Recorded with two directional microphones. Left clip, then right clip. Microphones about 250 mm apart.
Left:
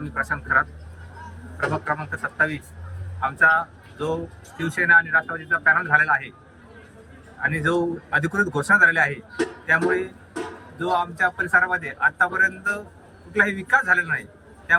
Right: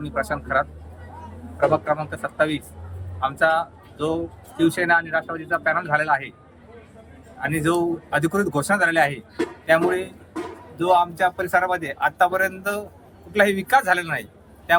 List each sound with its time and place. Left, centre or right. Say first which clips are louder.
0.1 s speech: left 2 dB; right
7.4 s speech: even; centre